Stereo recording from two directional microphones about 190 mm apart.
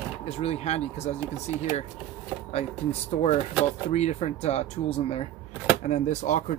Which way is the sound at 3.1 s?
35° left (ahead or behind).